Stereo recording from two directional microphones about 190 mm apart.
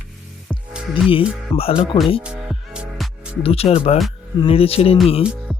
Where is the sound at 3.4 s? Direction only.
30° left (ahead or behind).